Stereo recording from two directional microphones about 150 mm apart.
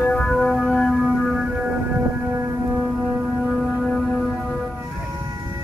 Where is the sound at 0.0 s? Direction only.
5° left (ahead or behind).